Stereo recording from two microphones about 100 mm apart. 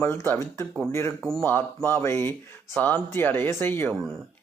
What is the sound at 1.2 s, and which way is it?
Speech, 5° left (ahead or behind).